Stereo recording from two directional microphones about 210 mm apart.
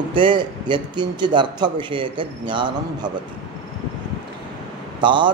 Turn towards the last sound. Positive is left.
turn(degrees=-20)  # may be behind; listen again after turning